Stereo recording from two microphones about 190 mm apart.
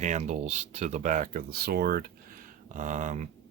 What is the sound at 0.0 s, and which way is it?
Speech, 40° right (ahead or behind).